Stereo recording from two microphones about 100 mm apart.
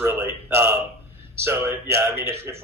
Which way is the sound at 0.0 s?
25° right (ahead or behind).